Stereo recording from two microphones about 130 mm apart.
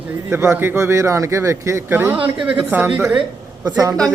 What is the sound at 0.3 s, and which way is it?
Speech, 20° right (ahead or behind).